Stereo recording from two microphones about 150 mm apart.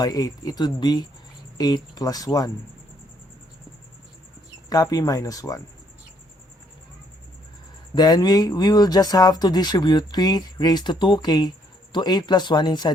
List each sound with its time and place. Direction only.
0.0 s speech: 25° left (ahead or behind)
4.7 s speech: 25° left (ahead or behind)
7.9 s speech: 25° left (ahead or behind)